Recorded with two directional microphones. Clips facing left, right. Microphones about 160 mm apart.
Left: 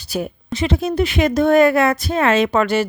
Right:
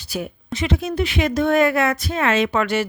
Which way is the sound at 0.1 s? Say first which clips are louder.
Left 4 dB; 35° left (ahead or behind).